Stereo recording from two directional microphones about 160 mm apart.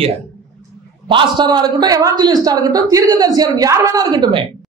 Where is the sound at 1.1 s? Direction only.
30° right (ahead or behind).